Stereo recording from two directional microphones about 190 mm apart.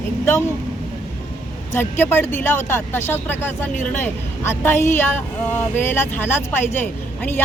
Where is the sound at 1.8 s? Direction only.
10° left (ahead or behind).